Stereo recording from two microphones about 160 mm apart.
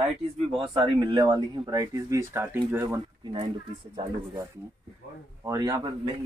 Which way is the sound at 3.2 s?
35° right (ahead or behind).